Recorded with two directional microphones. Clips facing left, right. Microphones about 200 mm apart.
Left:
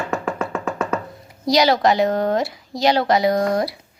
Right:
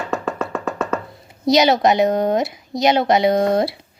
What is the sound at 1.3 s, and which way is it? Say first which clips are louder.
A woman's voice: right 2 dB; 20° right (ahead or behind).